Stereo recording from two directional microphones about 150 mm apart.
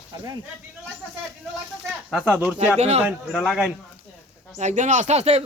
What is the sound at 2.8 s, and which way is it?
Speech, 45° right (ahead or behind).